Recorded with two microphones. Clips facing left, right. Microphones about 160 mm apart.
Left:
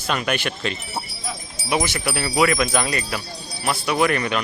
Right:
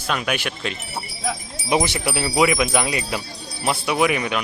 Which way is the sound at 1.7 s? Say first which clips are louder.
Right 2 dB; 25° right (ahead or behind).